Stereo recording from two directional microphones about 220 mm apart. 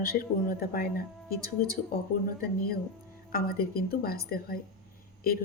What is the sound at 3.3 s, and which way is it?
Speech, 40° left (ahead or behind).